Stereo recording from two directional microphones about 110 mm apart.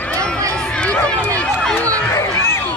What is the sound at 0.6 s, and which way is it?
Run, 10° left (ahead or behind).